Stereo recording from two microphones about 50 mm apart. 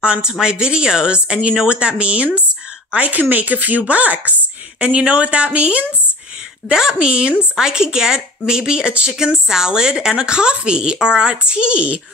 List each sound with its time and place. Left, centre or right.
0.0 s speech: centre
6.7 s speech: centre